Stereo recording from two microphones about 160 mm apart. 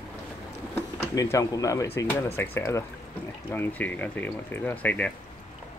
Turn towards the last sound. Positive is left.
turn(degrees=10)  # may be behind; listen again after turning